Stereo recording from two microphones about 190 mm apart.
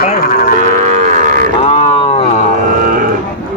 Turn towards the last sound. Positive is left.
turn(degrees=-45)  # may be behind; listen again after turning